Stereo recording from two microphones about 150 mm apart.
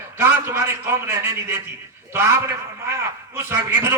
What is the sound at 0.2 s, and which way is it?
A man's voice, 15° right (ahead or behind).